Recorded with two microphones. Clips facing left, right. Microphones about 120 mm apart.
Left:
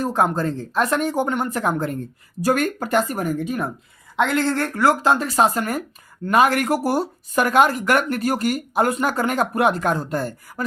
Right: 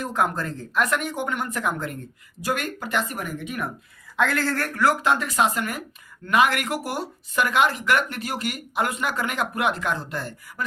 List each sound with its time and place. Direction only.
0.0 s speech: 30° left (ahead or behind)
4.2 s speech: 20° left (ahead or behind); by 10.7 s 40° left (ahead or behind)